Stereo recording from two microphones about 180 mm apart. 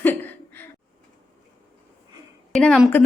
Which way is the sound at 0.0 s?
10° left (ahead or behind).